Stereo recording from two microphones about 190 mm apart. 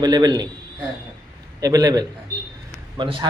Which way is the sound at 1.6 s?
20° right (ahead or behind).